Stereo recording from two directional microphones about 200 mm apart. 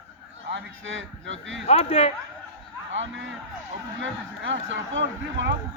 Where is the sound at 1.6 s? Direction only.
30° left (ahead or behind).